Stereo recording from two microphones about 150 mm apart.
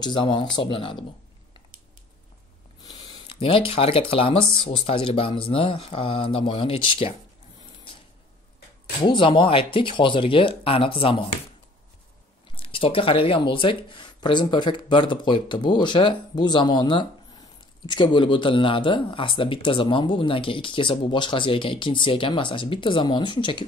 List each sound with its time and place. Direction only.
0.0 s speech: 30° left (ahead or behind)
2.8 s a sound: 30° left (ahead or behind)
4.1 s speech: 35° left (ahead or behind)
9.0 s speech: 35° left (ahead or behind)
12.5 s speech: 35° left (ahead or behind)